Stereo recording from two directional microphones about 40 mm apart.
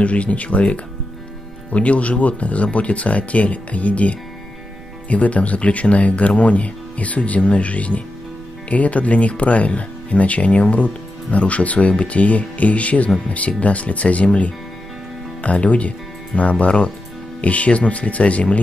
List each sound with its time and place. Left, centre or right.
0.0 s speech: left